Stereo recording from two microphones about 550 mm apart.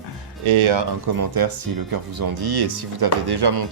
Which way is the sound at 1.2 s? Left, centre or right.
Right.